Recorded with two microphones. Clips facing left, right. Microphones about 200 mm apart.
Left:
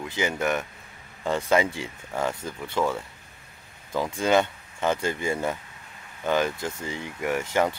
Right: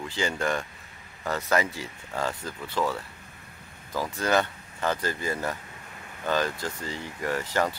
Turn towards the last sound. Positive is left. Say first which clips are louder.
# left 3 dB
turn(degrees=15)  # may be behind; listen again after turning